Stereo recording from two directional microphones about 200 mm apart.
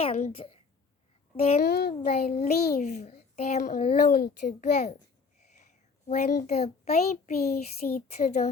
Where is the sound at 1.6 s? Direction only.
50° left (ahead or behind).